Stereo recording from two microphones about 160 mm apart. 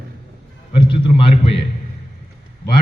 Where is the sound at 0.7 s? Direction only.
30° left (ahead or behind).